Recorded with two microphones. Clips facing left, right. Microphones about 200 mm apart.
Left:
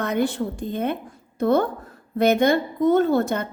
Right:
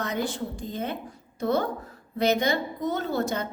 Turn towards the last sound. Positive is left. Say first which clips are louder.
# left 8 dB
turn(degrees=55)  # may be behind; listen again after turning